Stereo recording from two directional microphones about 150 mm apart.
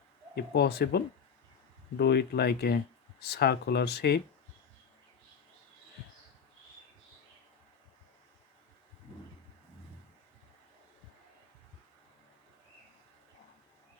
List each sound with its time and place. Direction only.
0.3 s speech: 90° left
2.0 s speech: 90° left